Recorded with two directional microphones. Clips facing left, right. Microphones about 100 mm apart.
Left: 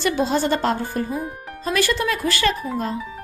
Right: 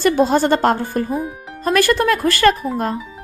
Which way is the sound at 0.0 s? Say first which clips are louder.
Right 6 dB; 50° right (ahead or behind).